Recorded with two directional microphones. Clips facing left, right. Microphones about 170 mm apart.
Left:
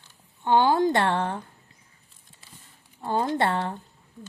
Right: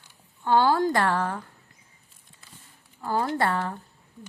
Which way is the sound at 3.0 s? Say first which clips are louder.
Left 1 dB; 25° left (ahead or behind).